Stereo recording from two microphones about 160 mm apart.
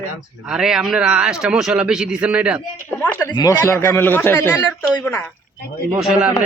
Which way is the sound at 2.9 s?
10° left (ahead or behind).